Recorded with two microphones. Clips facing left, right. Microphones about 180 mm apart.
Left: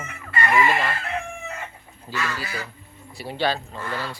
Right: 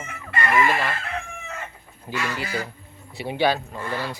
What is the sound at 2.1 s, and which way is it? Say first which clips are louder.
Speech: right 2 dB; 15° right (ahead or behind).